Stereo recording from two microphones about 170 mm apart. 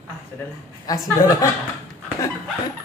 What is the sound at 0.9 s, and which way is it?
Speech, 20° left (ahead or behind).